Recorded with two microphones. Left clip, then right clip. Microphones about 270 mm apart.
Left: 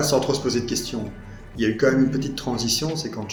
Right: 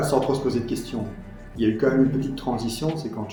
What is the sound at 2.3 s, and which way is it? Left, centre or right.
Speech, left.